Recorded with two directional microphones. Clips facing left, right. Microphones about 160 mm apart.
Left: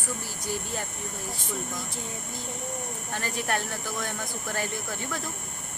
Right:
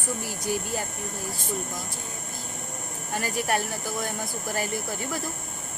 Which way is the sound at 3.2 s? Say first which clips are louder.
Right 4 dB; 5° right (ahead or behind).